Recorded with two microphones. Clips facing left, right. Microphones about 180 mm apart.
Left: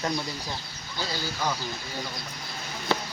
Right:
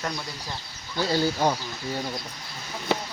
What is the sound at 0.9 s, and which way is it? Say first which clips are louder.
Speech: right 9 dB; 55° right (ahead or behind).